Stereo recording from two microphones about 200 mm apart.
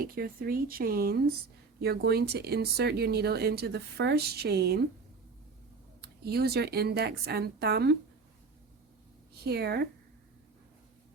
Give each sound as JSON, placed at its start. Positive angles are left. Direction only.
{"t": 0.0, "sound": "speech", "side_deg": -45}
{"t": 6.0, "sound": "speech", "side_deg": -55}
{"t": 9.5, "sound": "speech", "side_deg": -55}